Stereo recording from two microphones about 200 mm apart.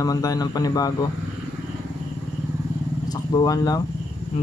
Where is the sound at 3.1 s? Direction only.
20° left (ahead or behind).